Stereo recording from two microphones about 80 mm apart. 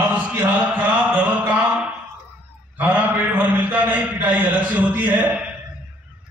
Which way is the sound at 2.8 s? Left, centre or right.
Right.